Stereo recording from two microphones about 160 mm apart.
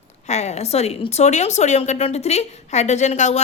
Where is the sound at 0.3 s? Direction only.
45° left (ahead or behind).